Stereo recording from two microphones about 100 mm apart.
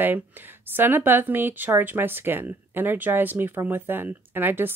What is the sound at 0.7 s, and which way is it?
Speech, 20° right (ahead or behind).